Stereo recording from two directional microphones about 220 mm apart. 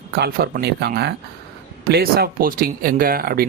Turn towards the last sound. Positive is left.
turn(degrees=-40)  # may be behind; listen again after turning